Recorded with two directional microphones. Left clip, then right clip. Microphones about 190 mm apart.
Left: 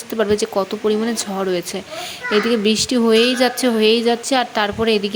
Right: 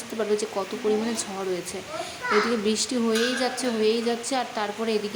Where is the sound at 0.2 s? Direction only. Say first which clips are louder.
Left 8 dB; 35° left (ahead or behind).